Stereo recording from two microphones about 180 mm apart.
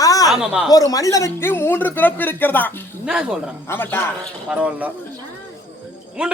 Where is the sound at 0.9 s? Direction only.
20° left (ahead or behind).